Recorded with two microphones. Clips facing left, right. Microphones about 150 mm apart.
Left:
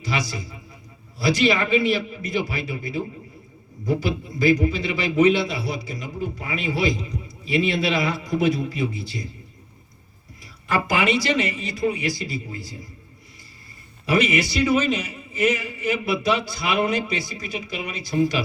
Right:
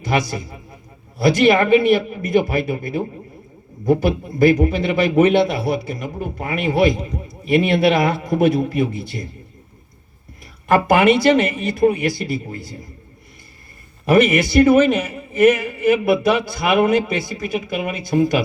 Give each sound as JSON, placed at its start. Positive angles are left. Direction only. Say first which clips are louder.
{"t": 0.0, "sound": "a man's voice", "louder": "right 7 dB", "side_deg": -50}
{"t": 10.4, "sound": "a man's voice", "louder": "right 8 dB", "side_deg": -55}
{"t": 14.0, "sound": "a man's voice", "louder": "right 7 dB", "side_deg": -55}